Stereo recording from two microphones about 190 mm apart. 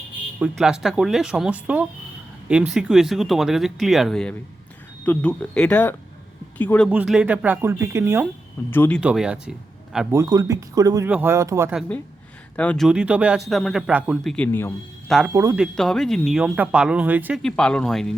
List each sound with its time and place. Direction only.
0.3 s speech: 5° right (ahead or behind)
6.9 s speech: 5° right (ahead or behind)
8.7 s speech: 10° left (ahead or behind)
9.0 s speech: 5° right (ahead or behind)
10.1 s speech: 15° right (ahead or behind)
12.5 s speech: 5° left (ahead or behind)
14.3 s a man's voice: 10° left (ahead or behind)
15.3 s speech: 15° right (ahead or behind)
15.5 s speech: centre (ahead or behind)
17.4 s speech: 5° left (ahead or behind)